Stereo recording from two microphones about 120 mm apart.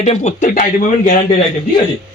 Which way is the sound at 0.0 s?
70° left (ahead or behind).